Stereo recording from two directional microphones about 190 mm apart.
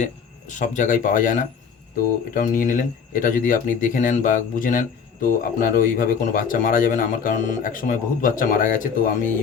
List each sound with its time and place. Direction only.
0.0 s speech: 40° left (ahead or behind)